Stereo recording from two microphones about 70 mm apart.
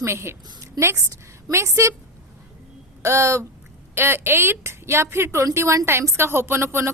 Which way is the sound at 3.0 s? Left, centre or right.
Right.